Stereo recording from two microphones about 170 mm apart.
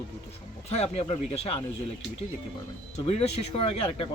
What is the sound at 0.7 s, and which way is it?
Speech, 35° left (ahead or behind).